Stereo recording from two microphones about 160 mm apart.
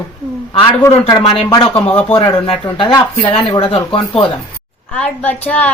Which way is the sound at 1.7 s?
10° left (ahead or behind).